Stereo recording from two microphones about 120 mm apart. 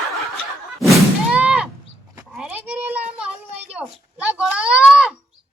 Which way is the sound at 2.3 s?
5° right (ahead or behind).